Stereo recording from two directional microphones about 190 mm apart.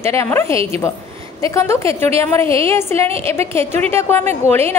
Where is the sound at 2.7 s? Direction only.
15° left (ahead or behind).